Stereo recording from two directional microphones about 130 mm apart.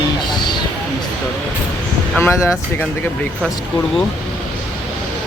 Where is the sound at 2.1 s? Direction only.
20° left (ahead or behind).